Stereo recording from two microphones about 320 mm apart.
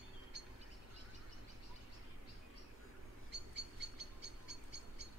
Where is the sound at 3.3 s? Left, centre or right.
Right.